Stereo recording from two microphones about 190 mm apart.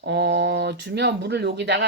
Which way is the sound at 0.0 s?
60° right (ahead or behind).